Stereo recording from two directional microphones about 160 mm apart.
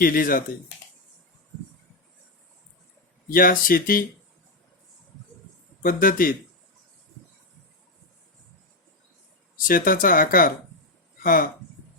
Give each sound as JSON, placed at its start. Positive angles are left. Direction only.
{"t": 0.0, "sound": "speech", "side_deg": 65}
{"t": 3.2, "sound": "speech", "side_deg": 60}
{"t": 5.8, "sound": "speech", "side_deg": 60}
{"t": 9.6, "sound": "speech", "side_deg": 60}